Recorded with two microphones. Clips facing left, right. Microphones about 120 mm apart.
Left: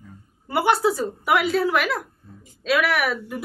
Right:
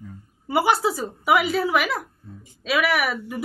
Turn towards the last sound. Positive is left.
turn(degrees=-5)  # may be behind; listen again after turning